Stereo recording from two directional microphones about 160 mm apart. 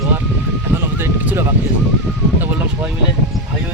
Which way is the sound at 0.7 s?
15° right (ahead or behind).